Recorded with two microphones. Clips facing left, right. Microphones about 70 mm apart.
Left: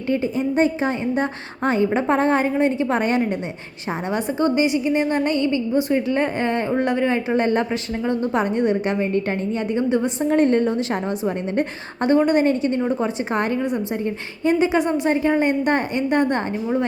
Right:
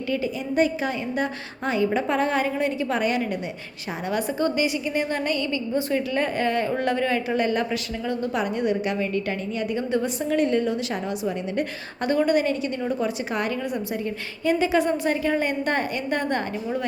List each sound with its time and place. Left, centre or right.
0.1 s a woman's voice: left
9.9 s a woman's voice: left
10.3 s a woman's voice: left
12.0 s a woman's voice: left
14.4 s a woman's voice: left